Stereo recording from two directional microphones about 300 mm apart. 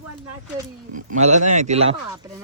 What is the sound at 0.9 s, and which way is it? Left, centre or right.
Speech, right.